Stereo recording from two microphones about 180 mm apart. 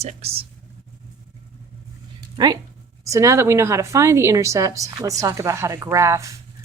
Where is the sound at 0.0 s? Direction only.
35° right (ahead or behind).